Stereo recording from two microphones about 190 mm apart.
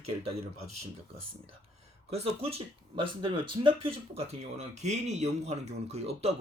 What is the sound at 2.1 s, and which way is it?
Speech, 30° right (ahead or behind).